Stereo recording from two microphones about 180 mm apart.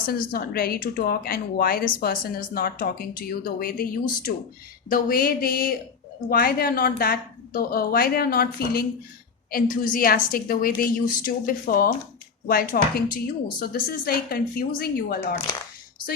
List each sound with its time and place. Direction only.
0.0 s a woman's voice: 55° left (ahead or behind)